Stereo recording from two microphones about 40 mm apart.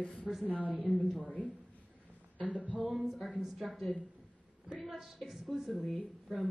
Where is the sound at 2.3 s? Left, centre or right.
Left.